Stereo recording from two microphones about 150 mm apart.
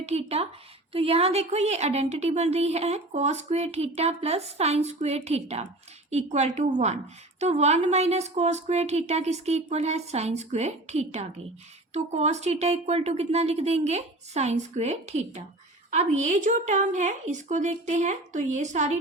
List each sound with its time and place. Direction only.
0.0 s a woman's voice: 45° right (ahead or behind)